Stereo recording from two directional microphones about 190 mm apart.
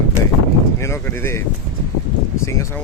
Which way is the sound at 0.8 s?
15° left (ahead or behind).